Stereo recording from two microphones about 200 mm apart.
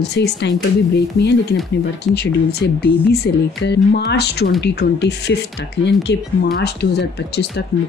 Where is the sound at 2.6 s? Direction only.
55° left (ahead or behind).